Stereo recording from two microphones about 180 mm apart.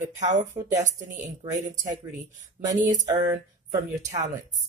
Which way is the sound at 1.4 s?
40° right (ahead or behind).